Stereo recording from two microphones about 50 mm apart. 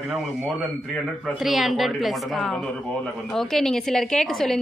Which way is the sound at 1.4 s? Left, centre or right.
Centre.